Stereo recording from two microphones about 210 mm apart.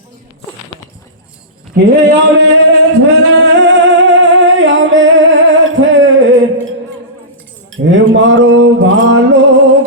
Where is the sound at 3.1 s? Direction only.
60° right (ahead or behind).